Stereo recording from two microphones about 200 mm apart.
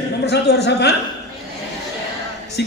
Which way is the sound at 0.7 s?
55° left (ahead or behind).